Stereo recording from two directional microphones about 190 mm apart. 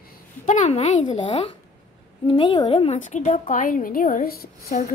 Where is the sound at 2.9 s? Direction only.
40° left (ahead or behind).